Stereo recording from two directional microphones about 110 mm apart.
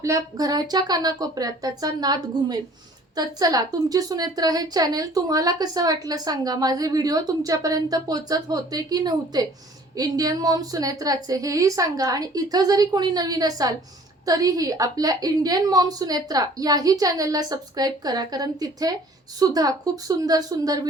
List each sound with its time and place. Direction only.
0.0 s a woman's voice: 30° right (ahead or behind)